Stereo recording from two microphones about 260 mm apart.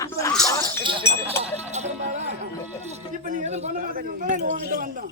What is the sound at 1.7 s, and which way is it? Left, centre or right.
Music, right.